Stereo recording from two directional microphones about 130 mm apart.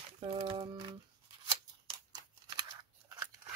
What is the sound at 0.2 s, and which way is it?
Speech, 45° right (ahead or behind).